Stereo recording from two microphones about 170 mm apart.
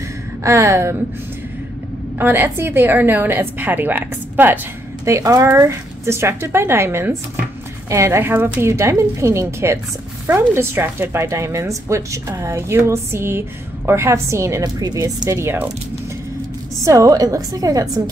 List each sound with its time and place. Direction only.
0.4 s speech: 15° right (ahead or behind)
2.1 s speech: 10° right (ahead or behind)
16.8 s a woman's voice: 20° right (ahead or behind)